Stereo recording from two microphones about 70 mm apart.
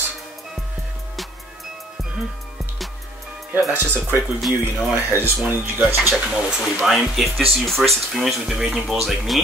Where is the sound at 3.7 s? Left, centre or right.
Right.